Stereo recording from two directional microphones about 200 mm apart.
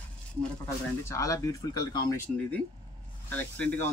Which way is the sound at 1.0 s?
15° left (ahead or behind).